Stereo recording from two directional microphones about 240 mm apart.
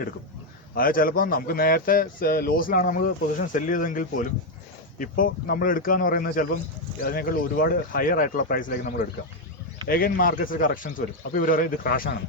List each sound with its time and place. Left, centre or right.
0.8 s a man's voice: left